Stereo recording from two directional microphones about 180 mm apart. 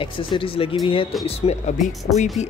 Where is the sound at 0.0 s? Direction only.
30° left (ahead or behind).